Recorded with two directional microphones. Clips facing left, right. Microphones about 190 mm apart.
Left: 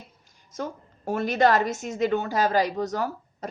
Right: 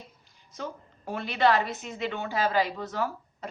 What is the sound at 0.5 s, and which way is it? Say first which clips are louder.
A woman's voice: left 4 dB; 45° left (ahead or behind).